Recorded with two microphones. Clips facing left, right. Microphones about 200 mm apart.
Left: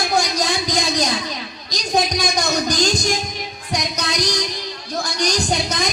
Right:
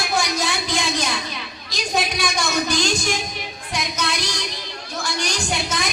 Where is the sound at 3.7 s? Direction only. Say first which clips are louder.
Left 2 dB; 40° left (ahead or behind).